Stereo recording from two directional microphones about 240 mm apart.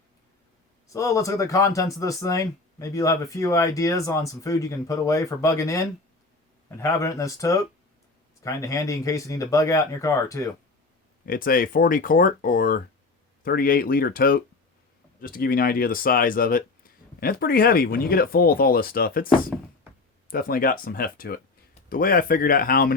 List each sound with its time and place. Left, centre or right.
0.9 s speech: centre
11.3 s speech: left
20.3 s speech: left